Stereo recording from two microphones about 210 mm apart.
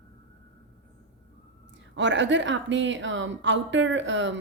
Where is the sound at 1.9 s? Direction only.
60° right (ahead or behind).